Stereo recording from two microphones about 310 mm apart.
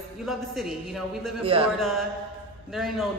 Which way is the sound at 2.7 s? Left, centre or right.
Centre.